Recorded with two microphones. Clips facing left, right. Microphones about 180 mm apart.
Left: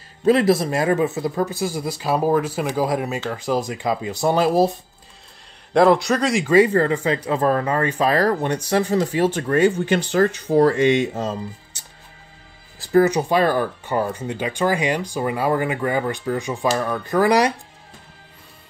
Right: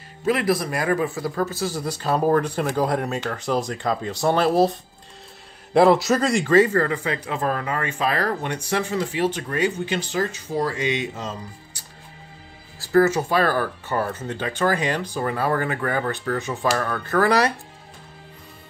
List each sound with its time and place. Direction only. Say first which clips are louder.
0.2 s speech: left 5 dB; 30° left (ahead or behind); by 4.7 s 10° left (ahead or behind)
5.7 s a man's voice: left 1 dB; 5° right (ahead or behind)
6.4 s speech: left 3 dB; 15° left (ahead or behind)
6.8 s speech: left 4 dB; 30° left (ahead or behind); by 11.3 s 45° left (ahead or behind)
11.7 s music: right 1 dB; 25° left (ahead or behind)
12.8 s speech: left 2 dB; 20° left (ahead or behind)